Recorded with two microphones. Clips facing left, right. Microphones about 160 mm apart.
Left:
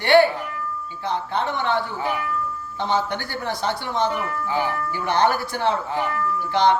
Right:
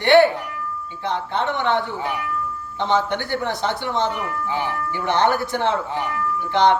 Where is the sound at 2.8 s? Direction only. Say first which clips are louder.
Right 3 dB; 20° right (ahead or behind).